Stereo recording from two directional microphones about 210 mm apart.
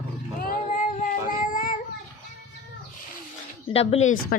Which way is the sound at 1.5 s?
40° left (ahead or behind).